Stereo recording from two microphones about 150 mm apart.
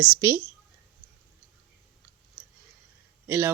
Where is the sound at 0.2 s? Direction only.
15° right (ahead or behind).